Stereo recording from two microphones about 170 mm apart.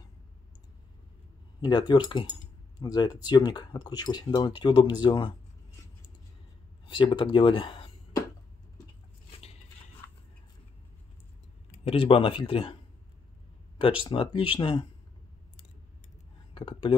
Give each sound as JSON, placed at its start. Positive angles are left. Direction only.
{"t": 1.6, "sound": "speech", "side_deg": 25}
{"t": 6.9, "sound": "speech", "side_deg": 30}
{"t": 10.0, "sound": "a sound", "side_deg": 15}
{"t": 11.8, "sound": "speech", "side_deg": 35}
{"t": 13.7, "sound": "speech", "side_deg": 30}
{"t": 16.5, "sound": "speech", "side_deg": 30}